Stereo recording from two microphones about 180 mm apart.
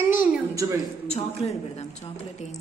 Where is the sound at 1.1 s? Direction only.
35° left (ahead or behind).